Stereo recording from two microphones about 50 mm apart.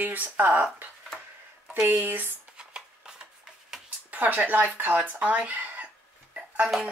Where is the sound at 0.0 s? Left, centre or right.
Right.